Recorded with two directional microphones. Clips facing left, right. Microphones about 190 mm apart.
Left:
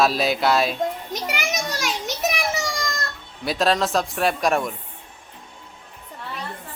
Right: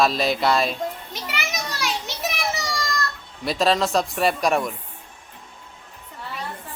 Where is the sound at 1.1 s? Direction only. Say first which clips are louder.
Left 4 dB; 40° left (ahead or behind).